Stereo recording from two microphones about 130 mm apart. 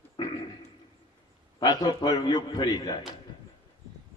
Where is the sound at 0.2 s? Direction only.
35° left (ahead or behind).